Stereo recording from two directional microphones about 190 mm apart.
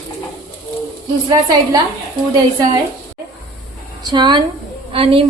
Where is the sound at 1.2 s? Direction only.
20° right (ahead or behind).